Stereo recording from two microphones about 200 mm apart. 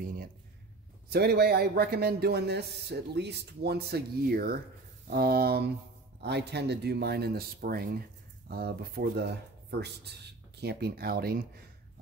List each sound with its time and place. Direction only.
1.1 s a man's voice: 50° right (ahead or behind)